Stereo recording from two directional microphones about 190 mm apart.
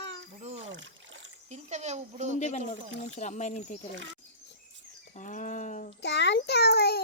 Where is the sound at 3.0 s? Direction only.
40° left (ahead or behind).